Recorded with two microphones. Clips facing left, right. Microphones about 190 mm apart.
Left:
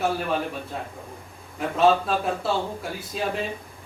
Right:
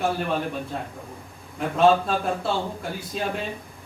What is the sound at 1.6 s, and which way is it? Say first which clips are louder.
A man's voice: right 1 dB; centre (ahead or behind).